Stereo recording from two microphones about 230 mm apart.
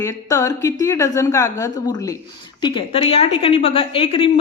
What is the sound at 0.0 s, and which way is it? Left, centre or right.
A woman's voice, centre.